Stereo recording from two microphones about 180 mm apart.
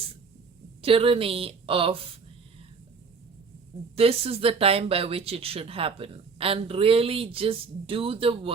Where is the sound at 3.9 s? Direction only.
35° right (ahead or behind).